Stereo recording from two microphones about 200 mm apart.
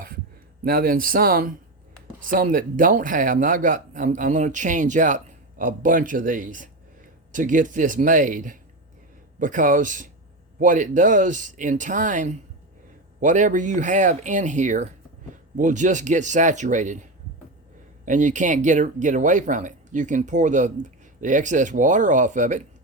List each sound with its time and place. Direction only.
0.6 s speech: 45° right (ahead or behind)